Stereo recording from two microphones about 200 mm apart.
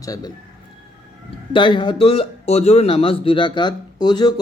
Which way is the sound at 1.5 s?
25° left (ahead or behind).